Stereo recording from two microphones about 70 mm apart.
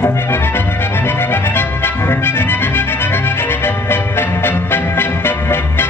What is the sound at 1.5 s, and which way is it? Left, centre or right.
Music, left.